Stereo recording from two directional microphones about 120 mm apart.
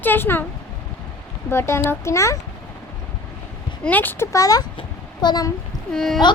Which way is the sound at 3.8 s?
15° left (ahead or behind).